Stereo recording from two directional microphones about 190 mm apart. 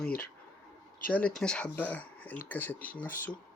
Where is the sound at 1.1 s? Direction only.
5° left (ahead or behind).